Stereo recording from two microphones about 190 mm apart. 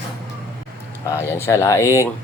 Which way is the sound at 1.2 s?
15° left (ahead or behind).